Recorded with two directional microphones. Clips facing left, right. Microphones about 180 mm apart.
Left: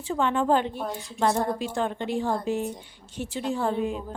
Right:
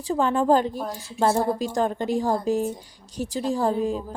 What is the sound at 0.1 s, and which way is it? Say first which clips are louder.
Speech: right 3 dB; 35° right (ahead or behind).